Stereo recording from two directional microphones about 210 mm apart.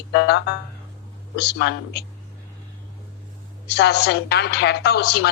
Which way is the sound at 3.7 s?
55° left (ahead or behind).